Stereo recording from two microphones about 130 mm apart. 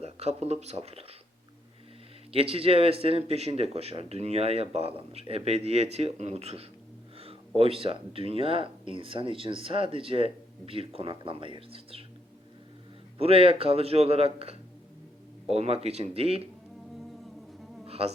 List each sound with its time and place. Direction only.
0.0 s speech: 55° right (ahead or behind)
2.3 s speech: 45° right (ahead or behind)
13.1 s speech: 50° right (ahead or behind)
17.8 s a sound: 50° right (ahead or behind)